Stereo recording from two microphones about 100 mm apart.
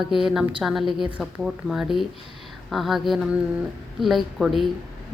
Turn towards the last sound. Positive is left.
turn(degrees=0)  # may be behind; listen again after turning